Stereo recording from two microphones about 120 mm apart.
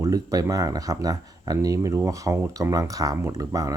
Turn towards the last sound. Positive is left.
turn(degrees=-30)  # may be behind; listen again after turning